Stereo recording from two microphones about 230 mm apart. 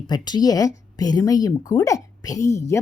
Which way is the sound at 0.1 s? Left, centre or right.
Centre.